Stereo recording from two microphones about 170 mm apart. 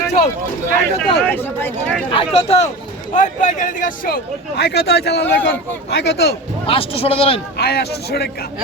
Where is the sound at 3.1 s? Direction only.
45° left (ahead or behind); by 6.3 s 75° left (ahead or behind).